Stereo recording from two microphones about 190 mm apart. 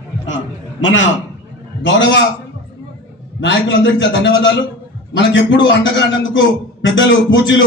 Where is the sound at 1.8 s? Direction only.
75° left (ahead or behind).